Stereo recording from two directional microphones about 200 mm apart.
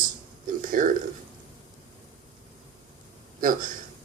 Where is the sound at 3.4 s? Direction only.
45° right (ahead or behind).